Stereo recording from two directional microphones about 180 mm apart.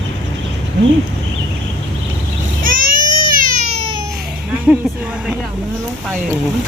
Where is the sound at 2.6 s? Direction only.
50° right (ahead or behind).